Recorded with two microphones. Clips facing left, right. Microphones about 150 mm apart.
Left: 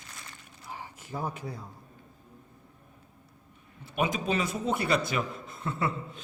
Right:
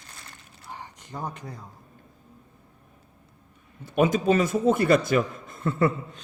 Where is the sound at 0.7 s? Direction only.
5° left (ahead or behind).